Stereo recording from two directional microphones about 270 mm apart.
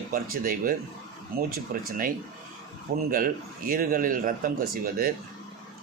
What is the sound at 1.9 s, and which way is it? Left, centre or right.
Speech, right.